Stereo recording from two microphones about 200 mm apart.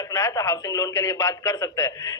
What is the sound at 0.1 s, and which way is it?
A man's voice, 15° left (ahead or behind).